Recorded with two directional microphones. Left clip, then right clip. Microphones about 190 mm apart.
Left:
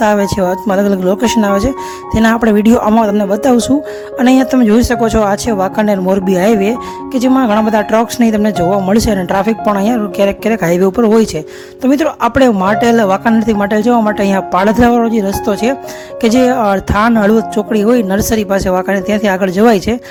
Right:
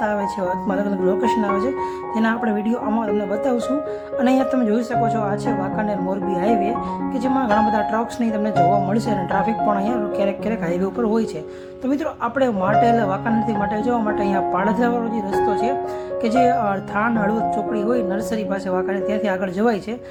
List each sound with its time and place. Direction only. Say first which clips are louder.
0.2 s speech: left 9 dB; 50° left (ahead or behind)